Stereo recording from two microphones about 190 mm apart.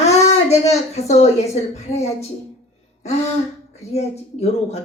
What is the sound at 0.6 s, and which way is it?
Speech, 35° left (ahead or behind).